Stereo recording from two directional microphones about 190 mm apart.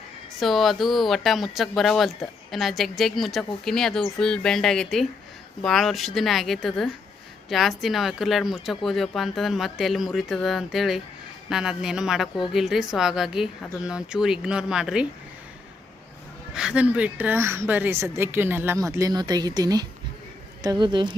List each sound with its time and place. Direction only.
0.3 s speech: centre (ahead or behind)
16.6 s a woman's voice: 5° right (ahead or behind); by 21.2 s 25° right (ahead or behind)